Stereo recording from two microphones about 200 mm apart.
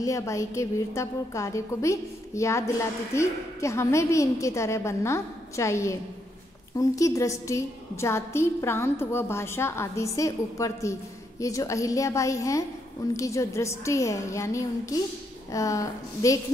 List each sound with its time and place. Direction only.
0.0 s a woman's voice: 15° left (ahead or behind)